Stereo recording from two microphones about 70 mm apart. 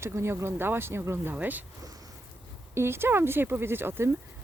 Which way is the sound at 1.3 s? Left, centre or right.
Right.